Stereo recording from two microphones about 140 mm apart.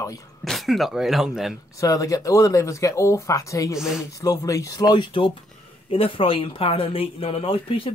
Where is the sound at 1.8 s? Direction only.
25° left (ahead or behind).